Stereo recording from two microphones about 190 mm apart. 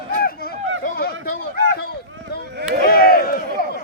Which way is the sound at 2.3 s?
55° left (ahead or behind).